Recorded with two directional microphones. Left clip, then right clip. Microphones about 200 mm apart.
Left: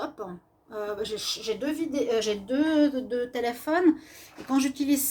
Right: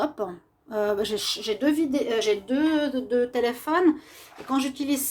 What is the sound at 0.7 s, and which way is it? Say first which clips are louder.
A woman's voice: right 7 dB; 45° right (ahead or behind).